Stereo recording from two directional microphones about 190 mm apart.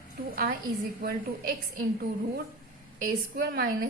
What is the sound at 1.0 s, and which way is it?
Speech, 50° right (ahead or behind).